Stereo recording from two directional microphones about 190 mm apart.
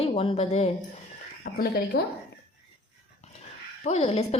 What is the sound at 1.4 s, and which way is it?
Speech, 55° left (ahead or behind).